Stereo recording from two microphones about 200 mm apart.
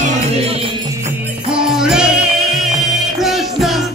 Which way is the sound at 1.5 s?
5° right (ahead or behind).